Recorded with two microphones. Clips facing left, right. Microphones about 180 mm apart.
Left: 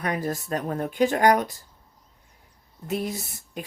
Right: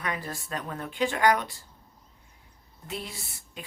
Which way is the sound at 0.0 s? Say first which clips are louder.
Left 7 dB; 40° left (ahead or behind).